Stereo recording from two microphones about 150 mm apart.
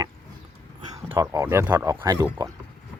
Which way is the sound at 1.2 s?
25° right (ahead or behind).